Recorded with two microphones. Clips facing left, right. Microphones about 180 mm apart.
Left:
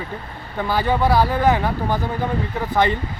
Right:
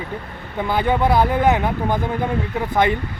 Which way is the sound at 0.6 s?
20° right (ahead or behind).